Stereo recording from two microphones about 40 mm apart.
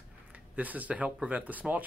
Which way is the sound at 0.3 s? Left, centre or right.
Right.